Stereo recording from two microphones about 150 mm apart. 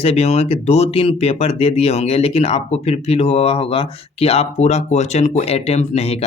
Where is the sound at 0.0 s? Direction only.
45° left (ahead or behind).